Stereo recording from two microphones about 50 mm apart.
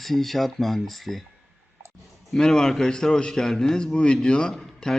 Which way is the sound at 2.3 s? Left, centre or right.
Centre.